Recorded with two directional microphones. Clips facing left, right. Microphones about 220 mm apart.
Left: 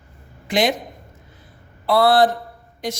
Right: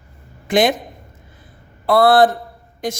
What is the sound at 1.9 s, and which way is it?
Speech, 50° right (ahead or behind).